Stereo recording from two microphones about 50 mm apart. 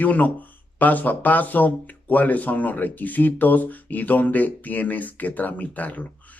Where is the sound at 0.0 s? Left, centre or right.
Left.